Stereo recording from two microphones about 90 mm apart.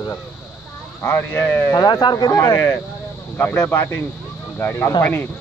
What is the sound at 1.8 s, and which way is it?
Speech, 50° left (ahead or behind).